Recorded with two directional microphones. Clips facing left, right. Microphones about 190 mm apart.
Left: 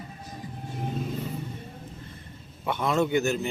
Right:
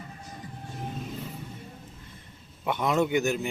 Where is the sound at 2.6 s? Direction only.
15° right (ahead or behind).